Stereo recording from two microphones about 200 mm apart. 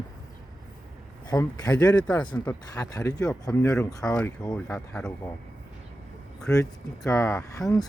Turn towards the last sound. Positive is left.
turn(degrees=0)  # may be behind; listen again after turning